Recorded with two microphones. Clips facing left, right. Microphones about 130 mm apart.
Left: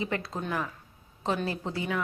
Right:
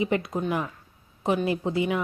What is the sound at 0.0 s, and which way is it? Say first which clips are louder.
A woman's voice: right 6 dB; 15° right (ahead or behind).